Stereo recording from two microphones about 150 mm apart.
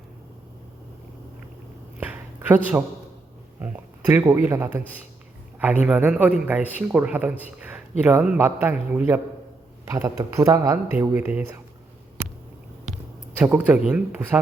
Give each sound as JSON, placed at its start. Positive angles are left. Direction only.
{"t": 2.0, "sound": "a sound", "side_deg": -10}
{"t": 3.6, "sound": "speech", "side_deg": -15}
{"t": 5.8, "sound": "a man's voice", "side_deg": -5}
{"t": 13.4, "sound": "a man's voice", "side_deg": -10}